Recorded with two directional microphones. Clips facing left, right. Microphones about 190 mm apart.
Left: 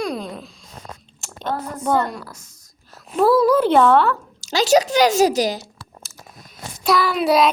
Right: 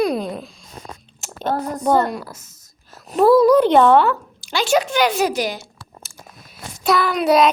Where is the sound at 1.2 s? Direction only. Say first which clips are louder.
Right 4 dB; centre (ahead or behind).